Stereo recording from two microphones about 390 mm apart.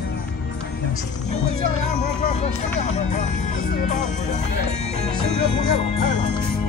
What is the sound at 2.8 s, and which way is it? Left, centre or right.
Music, centre.